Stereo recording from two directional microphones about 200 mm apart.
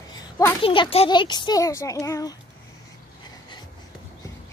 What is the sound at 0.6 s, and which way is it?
A child's voice, 30° left (ahead or behind).